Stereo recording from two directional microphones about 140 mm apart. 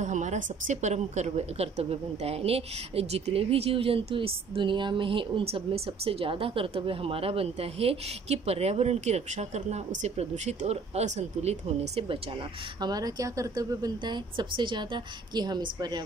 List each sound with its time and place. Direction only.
0.0 s a woman's voice: 60° right (ahead or behind); by 12.2 s 45° right (ahead or behind)
12.8 s speech: 25° right (ahead or behind)